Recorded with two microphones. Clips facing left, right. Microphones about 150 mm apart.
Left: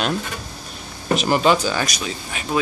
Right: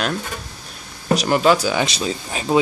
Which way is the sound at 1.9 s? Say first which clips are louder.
Right 4 dB; 30° right (ahead or behind).